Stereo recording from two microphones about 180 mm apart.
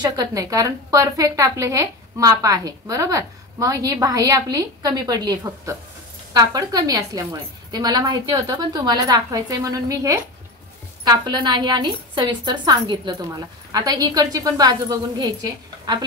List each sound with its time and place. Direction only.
0.0 s a woman's voice: 20° right (ahead or behind)